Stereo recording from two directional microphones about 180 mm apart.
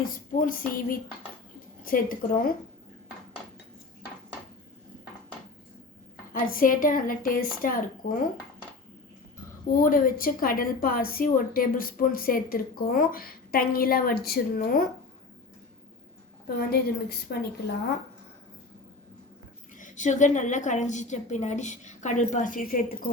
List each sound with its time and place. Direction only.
0.3 s a woman's voice: 50° left (ahead or behind)
6.3 s a woman's voice: 50° left (ahead or behind)
9.7 s a woman's voice: 50° left (ahead or behind)
16.6 s a woman's voice: 60° left (ahead or behind)
19.7 s a woman's voice: 45° left (ahead or behind)